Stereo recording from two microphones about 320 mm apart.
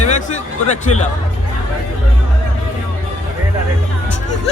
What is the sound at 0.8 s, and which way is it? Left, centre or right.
Speech, left.